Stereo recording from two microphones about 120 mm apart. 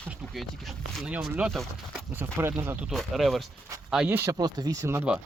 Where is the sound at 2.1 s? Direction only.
20° right (ahead or behind).